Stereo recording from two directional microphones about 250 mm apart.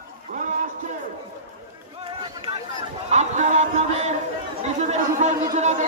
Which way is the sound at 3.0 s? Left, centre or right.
Right.